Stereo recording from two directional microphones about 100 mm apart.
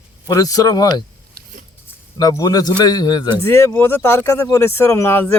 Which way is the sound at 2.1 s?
40° left (ahead or behind).